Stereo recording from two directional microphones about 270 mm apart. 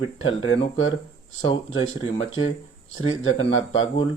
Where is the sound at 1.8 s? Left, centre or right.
Centre.